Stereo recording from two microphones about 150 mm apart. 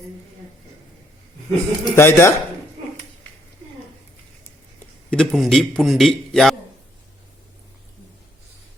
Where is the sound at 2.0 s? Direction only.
15° left (ahead or behind).